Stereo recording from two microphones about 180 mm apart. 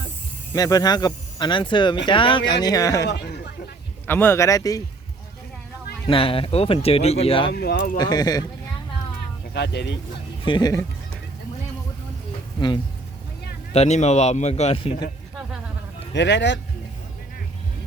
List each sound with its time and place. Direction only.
0.5 s a man's voice: 20° left (ahead or behind)
6.1 s speech: 30° left (ahead or behind)
7.5 s speech: 60° left (ahead or behind)
7.9 s speech: 25° left (ahead or behind)
9.5 s speech: 70° left (ahead or behind)
10.4 s speech: 25° left (ahead or behind)
12.5 s speech: 25° left (ahead or behind)
13.7 s speech: 40° left (ahead or behind)
16.1 s speech: 75° left (ahead or behind)